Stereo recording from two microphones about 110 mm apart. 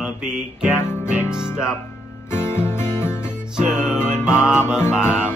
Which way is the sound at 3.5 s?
5° right (ahead or behind).